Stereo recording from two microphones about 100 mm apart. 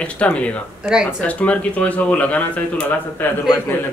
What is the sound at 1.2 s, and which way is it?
Speech, 15° left (ahead or behind).